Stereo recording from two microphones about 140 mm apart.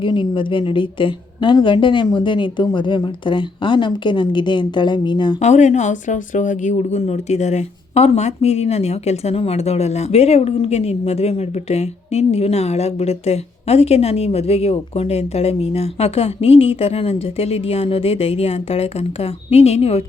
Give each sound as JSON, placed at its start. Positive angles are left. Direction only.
{"t": 0.0, "sound": "a woman's voice", "side_deg": 35}
{"t": 5.4, "sound": "speech", "side_deg": 55}